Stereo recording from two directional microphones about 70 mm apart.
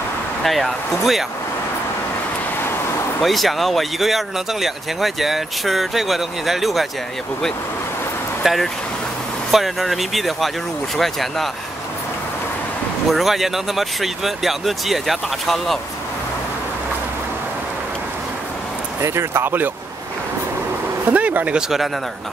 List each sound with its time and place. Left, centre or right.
0.4 s speech: centre
3.2 s speech: centre
8.4 s speech: centre
13.1 s speech: centre
18.9 s speech: right
21.0 s a sound: right
21.5 s speech: centre